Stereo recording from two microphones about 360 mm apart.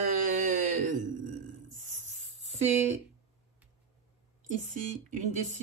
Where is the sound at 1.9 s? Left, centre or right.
Centre.